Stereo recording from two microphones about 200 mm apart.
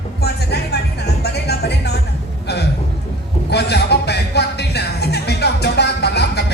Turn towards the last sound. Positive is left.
turn(degrees=55)  # may be behind; listen again after turning